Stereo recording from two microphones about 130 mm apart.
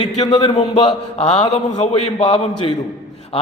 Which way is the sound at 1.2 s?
60° left (ahead or behind).